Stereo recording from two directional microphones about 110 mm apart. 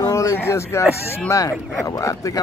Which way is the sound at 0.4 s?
25° left (ahead or behind).